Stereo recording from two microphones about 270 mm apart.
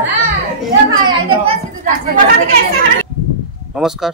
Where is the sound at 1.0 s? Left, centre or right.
Right.